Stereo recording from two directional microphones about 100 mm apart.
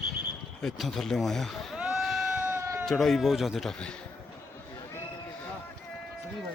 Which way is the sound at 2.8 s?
Centre (ahead or behind).